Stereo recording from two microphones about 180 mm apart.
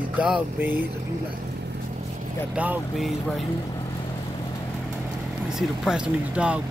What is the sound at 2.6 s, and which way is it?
Speech, 5° right (ahead or behind).